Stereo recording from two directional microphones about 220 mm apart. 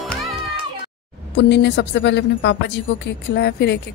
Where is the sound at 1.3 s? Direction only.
55° left (ahead or behind).